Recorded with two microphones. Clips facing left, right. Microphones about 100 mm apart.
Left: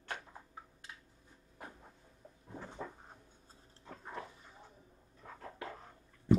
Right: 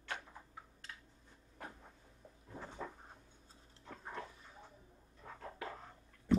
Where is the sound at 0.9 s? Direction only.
20° left (ahead or behind).